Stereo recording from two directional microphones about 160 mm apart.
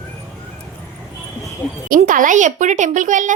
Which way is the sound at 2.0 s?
55° right (ahead or behind).